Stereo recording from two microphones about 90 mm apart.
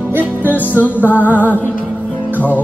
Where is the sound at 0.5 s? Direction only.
20° left (ahead or behind).